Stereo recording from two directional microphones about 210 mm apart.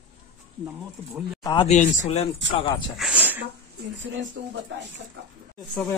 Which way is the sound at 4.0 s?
55° right (ahead or behind).